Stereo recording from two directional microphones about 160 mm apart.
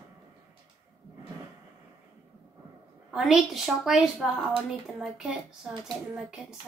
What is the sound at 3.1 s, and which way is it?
A woman's voice, 5° right (ahead or behind).